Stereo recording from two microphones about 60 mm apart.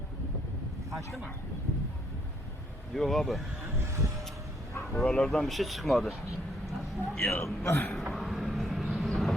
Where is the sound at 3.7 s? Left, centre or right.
Right.